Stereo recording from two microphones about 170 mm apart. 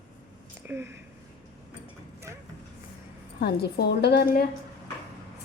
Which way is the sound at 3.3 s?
70° left (ahead or behind).